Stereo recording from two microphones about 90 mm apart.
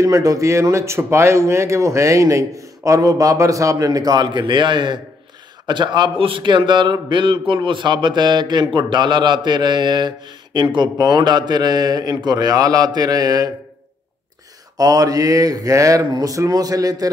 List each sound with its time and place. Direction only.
0.0 s speech: 40° right (ahead or behind)
4.3 s a man's voice: 60° right (ahead or behind)
14.8 s speech: 40° right (ahead or behind)